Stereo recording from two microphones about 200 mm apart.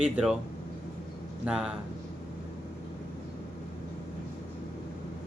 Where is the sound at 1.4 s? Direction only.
5° right (ahead or behind).